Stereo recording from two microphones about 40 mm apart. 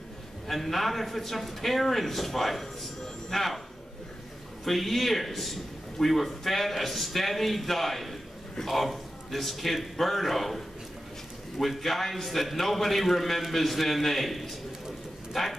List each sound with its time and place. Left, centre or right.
0.5 s a man's voice: centre
4.6 s a man's voice: centre